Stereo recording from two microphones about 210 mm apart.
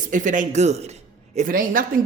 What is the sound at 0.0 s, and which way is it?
A man's voice, 40° right (ahead or behind).